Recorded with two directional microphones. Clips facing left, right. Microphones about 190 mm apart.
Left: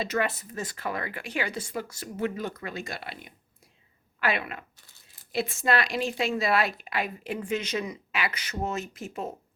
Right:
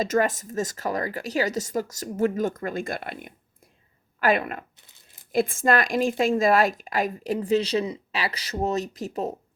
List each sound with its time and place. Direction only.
0.0 s a woman's voice: 45° right (ahead or behind)